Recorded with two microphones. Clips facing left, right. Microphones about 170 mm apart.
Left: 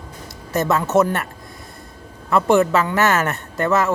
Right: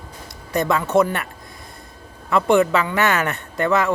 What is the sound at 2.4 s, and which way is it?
Speech, 5° left (ahead or behind).